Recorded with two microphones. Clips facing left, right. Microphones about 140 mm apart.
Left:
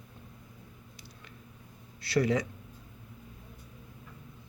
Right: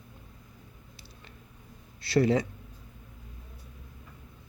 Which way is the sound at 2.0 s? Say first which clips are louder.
Right 3 dB; 25° right (ahead or behind).